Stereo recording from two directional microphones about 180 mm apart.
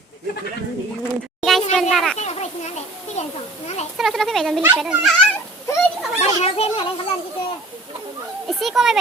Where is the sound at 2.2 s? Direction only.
40° left (ahead or behind).